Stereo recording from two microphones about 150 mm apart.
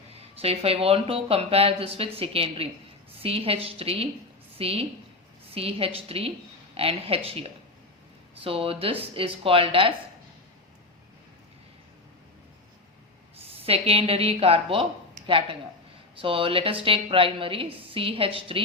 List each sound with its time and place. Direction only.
0.3 s a woman's voice: 40° right (ahead or behind)
13.3 s a woman's voice: 40° right (ahead or behind)